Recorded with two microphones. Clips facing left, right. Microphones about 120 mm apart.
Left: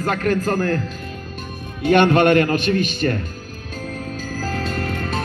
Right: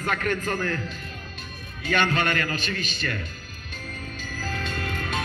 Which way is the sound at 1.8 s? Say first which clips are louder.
Left 11 dB; 60° left (ahead or behind).